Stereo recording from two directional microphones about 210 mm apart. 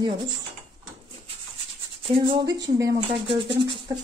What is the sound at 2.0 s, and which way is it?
Speech, 25° right (ahead or behind).